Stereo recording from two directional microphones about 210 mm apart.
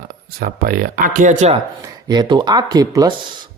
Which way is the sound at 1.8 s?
20° right (ahead or behind).